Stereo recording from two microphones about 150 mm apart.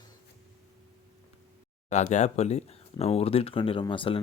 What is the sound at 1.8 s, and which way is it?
Speech, 50° left (ahead or behind).